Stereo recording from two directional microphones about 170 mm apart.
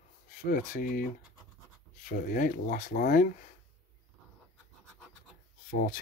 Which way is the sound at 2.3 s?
50° left (ahead or behind).